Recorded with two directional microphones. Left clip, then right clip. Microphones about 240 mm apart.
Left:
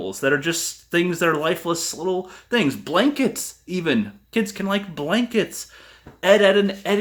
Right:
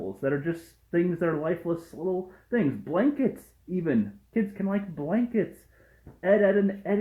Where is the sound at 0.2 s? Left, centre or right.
Centre.